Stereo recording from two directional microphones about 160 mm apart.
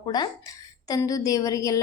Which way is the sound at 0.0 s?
25° left (ahead or behind).